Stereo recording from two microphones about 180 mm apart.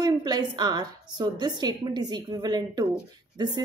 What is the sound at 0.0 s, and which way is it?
A woman's voice, 25° right (ahead or behind).